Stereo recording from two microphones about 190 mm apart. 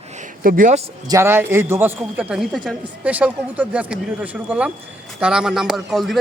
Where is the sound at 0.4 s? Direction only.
45° right (ahead or behind).